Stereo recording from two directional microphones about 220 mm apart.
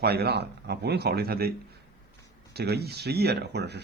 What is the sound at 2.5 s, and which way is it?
Speech, 45° right (ahead or behind).